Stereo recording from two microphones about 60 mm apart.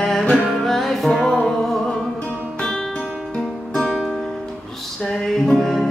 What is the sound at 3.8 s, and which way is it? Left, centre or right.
Music, centre.